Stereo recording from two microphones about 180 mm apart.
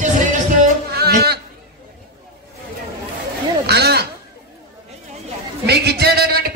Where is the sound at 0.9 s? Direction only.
60° right (ahead or behind).